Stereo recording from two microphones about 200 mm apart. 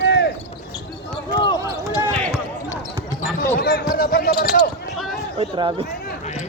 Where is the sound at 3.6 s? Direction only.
50° left (ahead or behind).